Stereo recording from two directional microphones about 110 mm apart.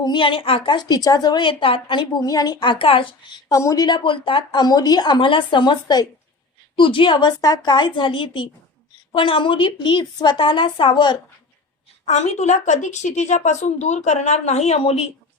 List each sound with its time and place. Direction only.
0.0 s a woman's voice: 45° left (ahead or behind)
2.2 s a woman's voice: 35° left (ahead or behind)
3.5 s a woman's voice: 30° left (ahead or behind)
3.8 s a woman's voice: 45° left (ahead or behind)
4.6 s a woman's voice: 35° left (ahead or behind)
12.0 s a woman's voice: 90° left; by 15.0 s 65° left (ahead or behind)